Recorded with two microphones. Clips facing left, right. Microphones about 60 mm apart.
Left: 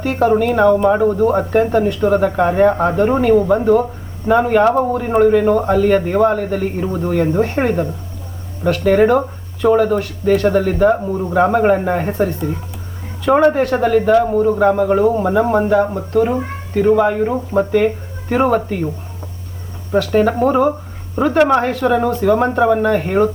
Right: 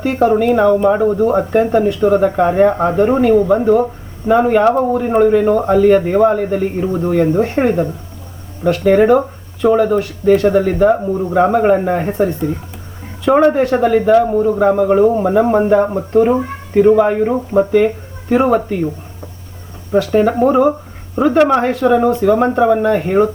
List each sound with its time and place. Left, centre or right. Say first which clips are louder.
0.0 s speech: right 2 dB; centre
13.2 s speech: right 1 dB; centre; by 16.8 s right
16.8 s speech: right 2 dB; centre
20.1 s speech: right 2 dB; centre